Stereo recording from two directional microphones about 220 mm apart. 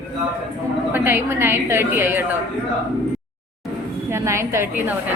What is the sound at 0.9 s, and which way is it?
A woman's voice, 10° right (ahead or behind).